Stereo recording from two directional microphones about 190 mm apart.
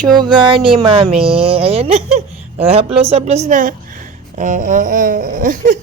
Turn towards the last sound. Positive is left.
turn(degrees=-45)  # may be behind; listen again after turning